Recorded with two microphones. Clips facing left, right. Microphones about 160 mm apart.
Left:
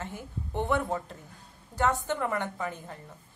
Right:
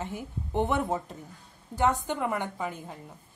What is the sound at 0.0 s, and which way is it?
Speech, 15° right (ahead or behind).